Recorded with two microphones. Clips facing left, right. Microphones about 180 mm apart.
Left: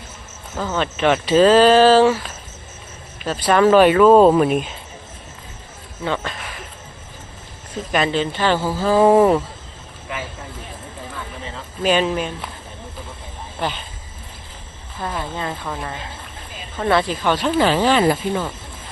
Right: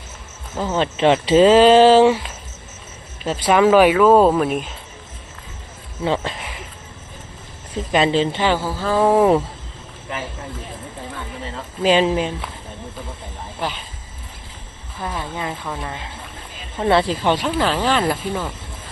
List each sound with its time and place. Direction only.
0.5 s speech: 20° right (ahead or behind)
3.2 s speech: 20° right (ahead or behind); by 4.7 s centre (ahead or behind)
6.1 s speech: 25° right (ahead or behind)
7.9 s speech: 25° right (ahead or behind)
8.4 s speech: 10° right (ahead or behind)
8.6 s speech: 5° left (ahead or behind)
11.8 s speech: 25° right (ahead or behind)
13.6 s speech: 5° right (ahead or behind)
15.0 s speech: 15° right (ahead or behind)
16.7 s speech: 25° right (ahead or behind)
17.4 s speech: 5° left (ahead or behind)